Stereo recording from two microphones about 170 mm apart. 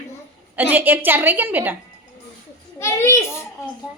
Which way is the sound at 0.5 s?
10° right (ahead or behind).